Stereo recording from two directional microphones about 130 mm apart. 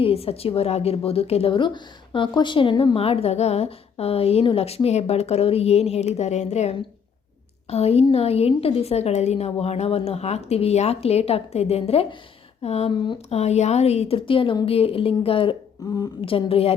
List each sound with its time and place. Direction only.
0.0 s a woman's voice: 50° left (ahead or behind)
12.9 s speech: 40° left (ahead or behind)
13.3 s a woman's voice: 55° left (ahead or behind)